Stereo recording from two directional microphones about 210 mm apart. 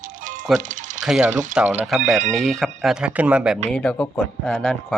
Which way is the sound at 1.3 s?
35° right (ahead or behind).